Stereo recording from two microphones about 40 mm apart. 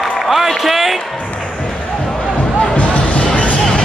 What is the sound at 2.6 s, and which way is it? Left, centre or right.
Music, left.